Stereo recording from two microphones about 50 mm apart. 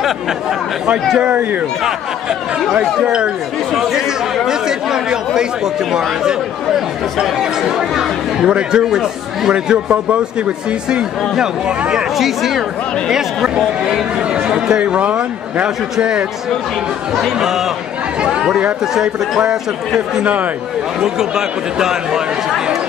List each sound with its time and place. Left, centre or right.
1.2 s speech: right
3.0 s speech: centre
4.5 s speech: centre
7.3 s speech: centre
9.5 s speech: right
12.2 s speech: centre
13.8 s speech: centre
17.1 s speech: centre
21.0 s speech: centre